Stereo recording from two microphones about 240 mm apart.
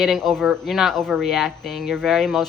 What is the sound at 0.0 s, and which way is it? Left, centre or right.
Speech, centre.